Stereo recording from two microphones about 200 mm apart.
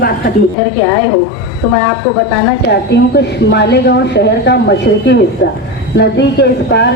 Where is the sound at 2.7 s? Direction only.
60° left (ahead or behind).